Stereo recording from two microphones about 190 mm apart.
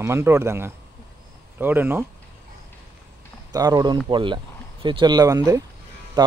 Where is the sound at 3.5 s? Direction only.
20° right (ahead or behind).